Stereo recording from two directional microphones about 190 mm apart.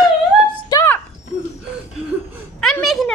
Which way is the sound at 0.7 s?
20° left (ahead or behind).